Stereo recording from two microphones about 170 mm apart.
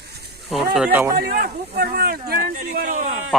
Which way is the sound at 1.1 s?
60° right (ahead or behind).